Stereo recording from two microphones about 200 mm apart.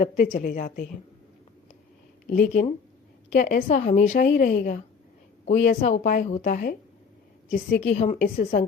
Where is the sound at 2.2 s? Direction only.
40° left (ahead or behind).